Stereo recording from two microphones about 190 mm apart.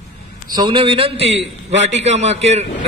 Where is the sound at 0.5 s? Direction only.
25° right (ahead or behind).